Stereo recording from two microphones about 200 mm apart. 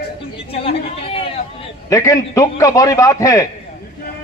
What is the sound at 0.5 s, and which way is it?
Chatter, 30° left (ahead or behind).